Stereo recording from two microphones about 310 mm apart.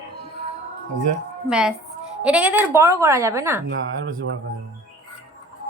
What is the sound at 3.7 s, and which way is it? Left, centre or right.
Speech, right.